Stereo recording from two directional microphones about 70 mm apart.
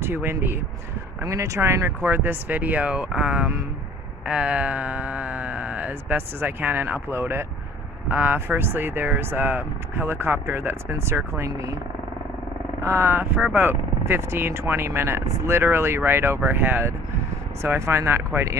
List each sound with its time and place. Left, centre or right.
0.0 s speech: right
1.2 s speech: right
2.0 s speech: right
12.8 s speech: right